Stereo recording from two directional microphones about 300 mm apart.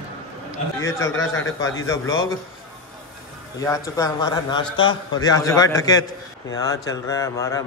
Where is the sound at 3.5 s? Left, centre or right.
Centre.